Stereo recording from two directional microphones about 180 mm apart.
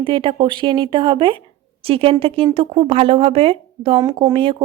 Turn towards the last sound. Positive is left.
turn(degrees=-30)  # may be behind; listen again after turning